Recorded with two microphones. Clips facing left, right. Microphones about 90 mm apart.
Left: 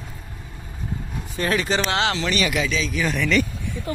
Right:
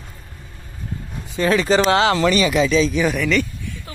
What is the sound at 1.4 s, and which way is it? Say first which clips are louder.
Speech: right 5 dB; 25° right (ahead or behind).